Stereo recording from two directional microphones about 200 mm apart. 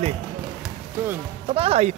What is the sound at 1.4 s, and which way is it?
Speech, 30° right (ahead or behind).